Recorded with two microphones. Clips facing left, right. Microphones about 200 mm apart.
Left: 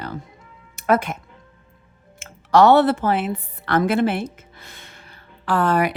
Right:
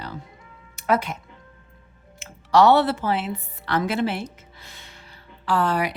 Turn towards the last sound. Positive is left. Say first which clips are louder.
# left 3 dB
turn(degrees=50)  # may be behind; listen again after turning